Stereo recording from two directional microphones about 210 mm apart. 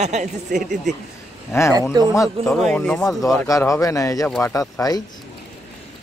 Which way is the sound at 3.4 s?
15° left (ahead or behind).